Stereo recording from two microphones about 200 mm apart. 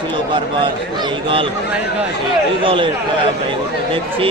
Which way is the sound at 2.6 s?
25° right (ahead or behind).